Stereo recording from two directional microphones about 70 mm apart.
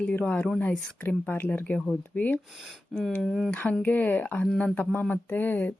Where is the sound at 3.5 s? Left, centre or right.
Centre.